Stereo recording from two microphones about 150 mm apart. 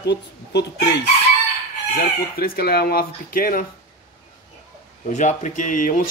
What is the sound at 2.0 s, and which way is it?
Speech, 90° left.